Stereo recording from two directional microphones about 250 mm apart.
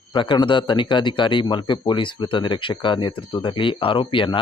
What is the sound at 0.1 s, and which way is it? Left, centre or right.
Speech, centre.